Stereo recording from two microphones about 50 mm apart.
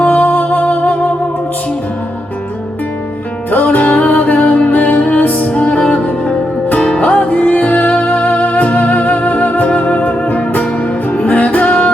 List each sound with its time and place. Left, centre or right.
0.0 s music: left
3.5 s music: left